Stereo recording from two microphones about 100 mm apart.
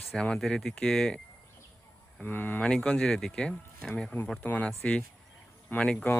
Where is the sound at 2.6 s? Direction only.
10° left (ahead or behind).